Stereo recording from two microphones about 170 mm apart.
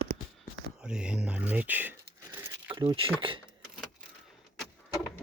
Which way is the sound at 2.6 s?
30° right (ahead or behind).